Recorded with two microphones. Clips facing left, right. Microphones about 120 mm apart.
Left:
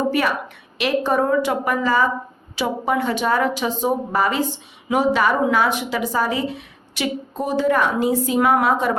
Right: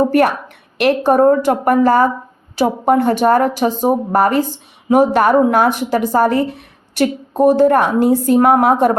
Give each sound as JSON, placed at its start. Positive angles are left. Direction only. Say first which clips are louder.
{"t": 0.1, "sound": "a woman's voice", "louder": "right 7 dB", "side_deg": -55}